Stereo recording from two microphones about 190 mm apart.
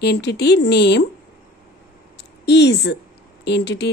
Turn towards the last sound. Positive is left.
turn(degrees=65)  # may be behind; listen again after turning